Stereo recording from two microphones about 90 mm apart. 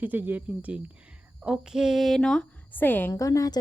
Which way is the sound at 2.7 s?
20° left (ahead or behind).